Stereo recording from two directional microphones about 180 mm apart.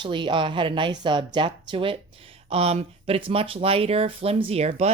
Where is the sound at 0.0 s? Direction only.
25° right (ahead or behind).